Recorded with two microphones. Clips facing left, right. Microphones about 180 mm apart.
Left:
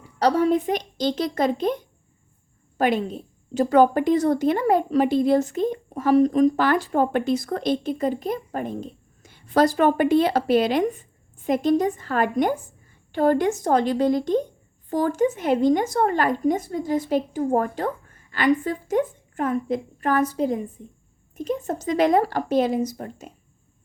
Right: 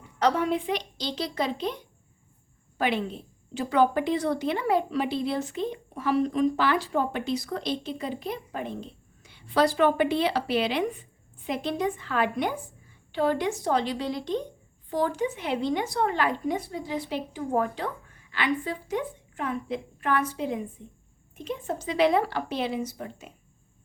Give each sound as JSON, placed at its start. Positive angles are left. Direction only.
{"t": 0.2, "sound": "a woman's voice", "side_deg": 35}